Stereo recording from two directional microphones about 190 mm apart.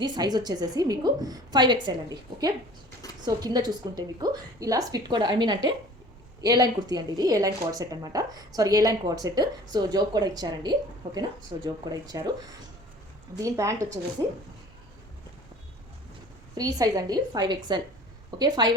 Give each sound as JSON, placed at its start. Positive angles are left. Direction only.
{"t": 0.0, "sound": "speech", "side_deg": -20}
{"t": 13.4, "sound": "a woman's voice", "side_deg": -15}
{"t": 16.6, "sound": "speech", "side_deg": -20}